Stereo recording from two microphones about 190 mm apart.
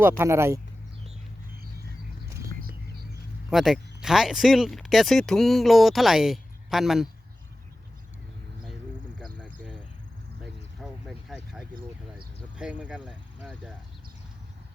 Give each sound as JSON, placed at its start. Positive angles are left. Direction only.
{"t": 0.2, "sound": "speech", "side_deg": -15}
{"t": 2.5, "sound": "music", "side_deg": -50}
{"t": 3.5, "sound": "speech", "side_deg": 0}
{"t": 9.2, "sound": "a sound", "side_deg": 5}
{"t": 10.8, "sound": "a sound", "side_deg": 0}
{"t": 12.5, "sound": "speech", "side_deg": -5}